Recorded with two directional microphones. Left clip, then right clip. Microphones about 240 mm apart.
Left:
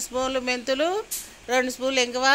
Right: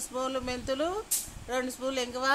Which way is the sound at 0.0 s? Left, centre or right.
Centre.